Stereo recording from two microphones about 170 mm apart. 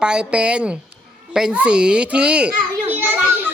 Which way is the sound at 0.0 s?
5° right (ahead or behind).